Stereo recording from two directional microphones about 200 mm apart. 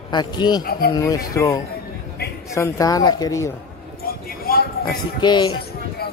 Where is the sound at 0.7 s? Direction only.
50° left (ahead or behind).